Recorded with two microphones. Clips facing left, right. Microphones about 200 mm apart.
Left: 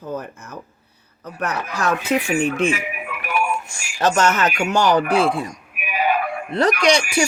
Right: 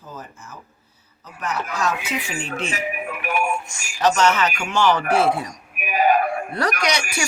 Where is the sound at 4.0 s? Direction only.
45° left (ahead or behind).